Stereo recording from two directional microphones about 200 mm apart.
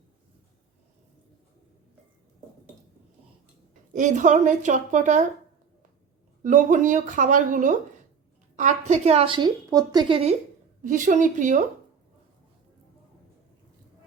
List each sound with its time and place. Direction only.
3.9 s speech: 40° right (ahead or behind)
6.4 s a woman's voice: 40° right (ahead or behind)
10.8 s speech: 40° right (ahead or behind)